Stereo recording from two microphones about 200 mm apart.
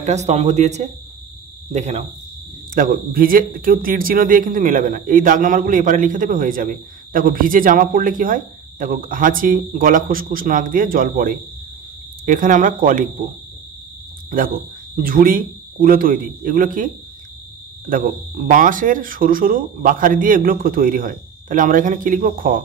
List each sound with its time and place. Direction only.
0.0 s speech: 35° right (ahead or behind)
14.3 s speech: 45° right (ahead or behind)